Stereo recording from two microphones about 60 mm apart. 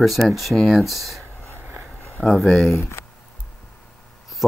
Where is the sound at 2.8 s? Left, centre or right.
Left.